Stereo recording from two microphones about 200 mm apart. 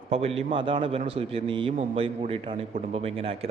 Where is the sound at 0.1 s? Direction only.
30° right (ahead or behind).